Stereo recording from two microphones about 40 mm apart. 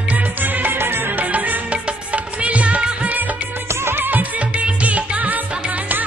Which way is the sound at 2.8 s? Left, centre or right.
Right.